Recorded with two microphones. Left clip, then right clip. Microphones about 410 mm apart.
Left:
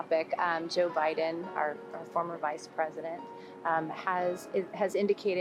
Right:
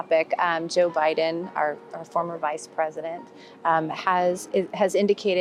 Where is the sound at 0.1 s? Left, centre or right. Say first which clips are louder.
Right 8 dB; right.